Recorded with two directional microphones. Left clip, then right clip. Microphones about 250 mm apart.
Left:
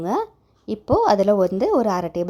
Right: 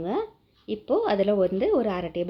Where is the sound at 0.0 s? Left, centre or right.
Left.